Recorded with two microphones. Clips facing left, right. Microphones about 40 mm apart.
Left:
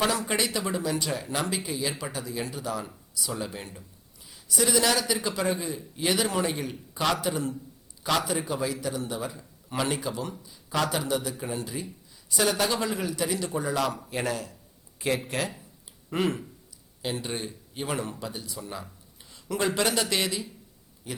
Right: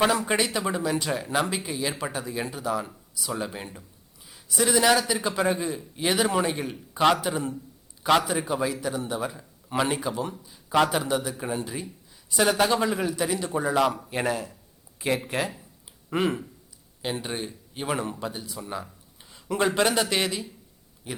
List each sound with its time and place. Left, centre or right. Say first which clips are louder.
0.0 s a man's voice: right 3 dB; right
17.0 s a man's voice: right 1 dB; centre